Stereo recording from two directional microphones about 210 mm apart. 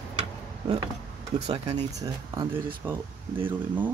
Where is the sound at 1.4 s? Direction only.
30° right (ahead or behind).